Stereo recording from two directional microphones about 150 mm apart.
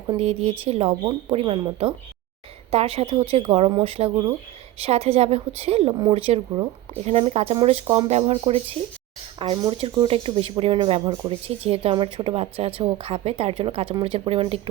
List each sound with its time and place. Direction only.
0.2 s speech: 40° right (ahead or behind)